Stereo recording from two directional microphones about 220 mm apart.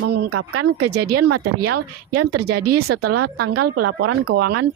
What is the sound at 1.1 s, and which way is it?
Speech, 90° right.